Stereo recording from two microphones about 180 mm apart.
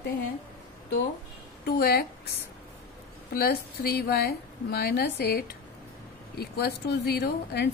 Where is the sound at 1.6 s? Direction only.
60° left (ahead or behind).